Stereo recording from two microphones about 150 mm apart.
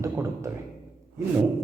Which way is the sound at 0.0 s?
20° right (ahead or behind).